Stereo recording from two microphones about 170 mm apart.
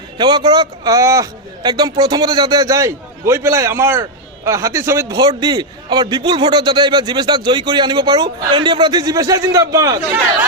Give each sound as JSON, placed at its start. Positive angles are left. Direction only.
{"t": 0.2, "sound": "a man's voice", "side_deg": -25}